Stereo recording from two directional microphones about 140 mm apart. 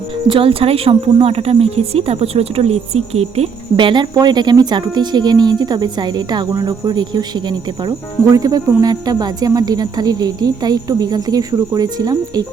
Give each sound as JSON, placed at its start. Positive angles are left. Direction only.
{"t": 0.3, "sound": "a woman's voice", "side_deg": -40}
{"t": 3.8, "sound": "speech", "side_deg": -35}